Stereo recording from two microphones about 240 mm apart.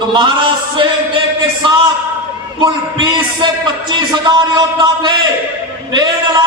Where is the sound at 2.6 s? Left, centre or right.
Centre.